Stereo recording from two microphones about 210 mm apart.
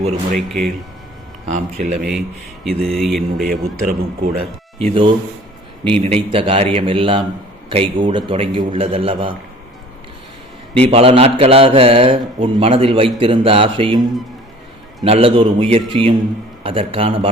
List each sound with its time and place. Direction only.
0.3 s speech: centre (ahead or behind)
1.5 s speech: 35° right (ahead or behind)
2.0 s speech: centre (ahead or behind)
3.8 s speech: 40° right (ahead or behind)
4.8 s speech: 25° right (ahead or behind)
10.8 s speech: 30° right (ahead or behind)
15.0 s speech: 25° right (ahead or behind)